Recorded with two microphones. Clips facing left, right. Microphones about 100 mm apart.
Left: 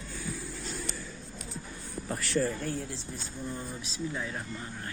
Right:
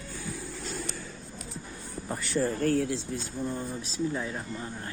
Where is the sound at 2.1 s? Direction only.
Centre (ahead or behind).